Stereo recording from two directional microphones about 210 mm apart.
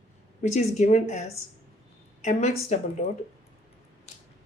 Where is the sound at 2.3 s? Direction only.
35° left (ahead or behind).